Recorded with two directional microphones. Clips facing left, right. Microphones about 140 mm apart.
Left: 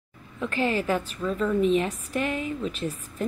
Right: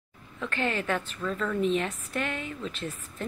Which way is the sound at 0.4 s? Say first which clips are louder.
Left 4 dB; 5° left (ahead or behind).